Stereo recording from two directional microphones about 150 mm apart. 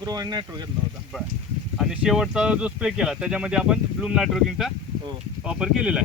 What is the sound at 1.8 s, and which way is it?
Speech, 5° right (ahead or behind).